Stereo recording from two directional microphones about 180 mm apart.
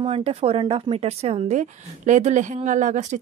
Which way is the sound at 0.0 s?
30° right (ahead or behind).